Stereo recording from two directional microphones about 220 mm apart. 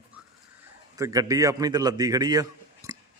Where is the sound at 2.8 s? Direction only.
15° right (ahead or behind).